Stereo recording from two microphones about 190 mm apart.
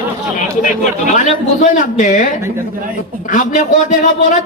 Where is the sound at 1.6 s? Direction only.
40° left (ahead or behind).